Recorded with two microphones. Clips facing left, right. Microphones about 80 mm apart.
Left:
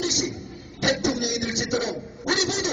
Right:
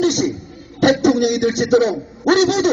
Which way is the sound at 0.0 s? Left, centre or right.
Right.